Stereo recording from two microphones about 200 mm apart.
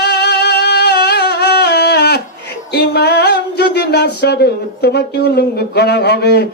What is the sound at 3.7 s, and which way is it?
Speech, 55° left (ahead or behind).